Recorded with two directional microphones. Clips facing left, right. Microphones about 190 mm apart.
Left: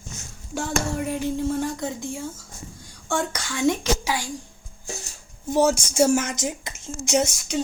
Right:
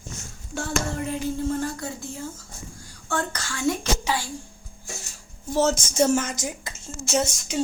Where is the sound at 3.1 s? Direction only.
15° left (ahead or behind).